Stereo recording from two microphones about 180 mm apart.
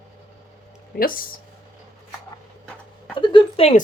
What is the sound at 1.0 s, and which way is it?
Speech, 50° left (ahead or behind).